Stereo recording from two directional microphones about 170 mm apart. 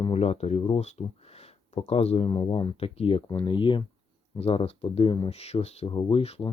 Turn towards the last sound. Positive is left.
turn(degrees=35)  # may be behind; listen again after turning